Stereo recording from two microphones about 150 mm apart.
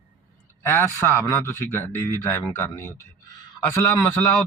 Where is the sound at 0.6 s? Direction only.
15° left (ahead or behind).